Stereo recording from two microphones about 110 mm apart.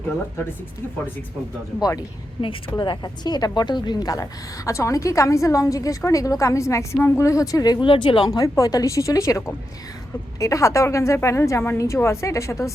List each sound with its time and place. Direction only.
1.8 s a woman's voice: 35° left (ahead or behind)
2.4 s a woman's voice: 50° left (ahead or behind)
7.9 s speech: 50° left (ahead or behind)
8.4 s a woman's voice: 35° left (ahead or behind)
10.4 s a woman's voice: 30° left (ahead or behind)